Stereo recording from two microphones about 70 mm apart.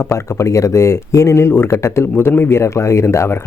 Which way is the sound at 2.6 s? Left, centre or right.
Left.